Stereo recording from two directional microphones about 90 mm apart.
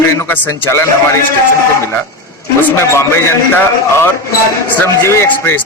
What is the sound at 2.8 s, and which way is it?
A man's voice, 30° left (ahead or behind).